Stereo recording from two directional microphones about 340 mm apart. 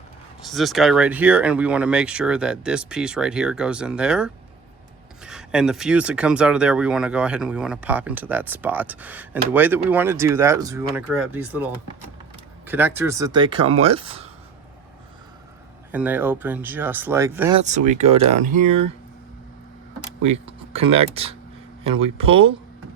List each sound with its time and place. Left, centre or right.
0.4 s speech: centre
15.9 s speech: centre
17.6 s speech: right
20.2 s a sound: centre
20.9 s speech: centre